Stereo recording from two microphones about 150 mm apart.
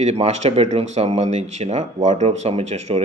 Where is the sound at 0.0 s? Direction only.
45° right (ahead or behind).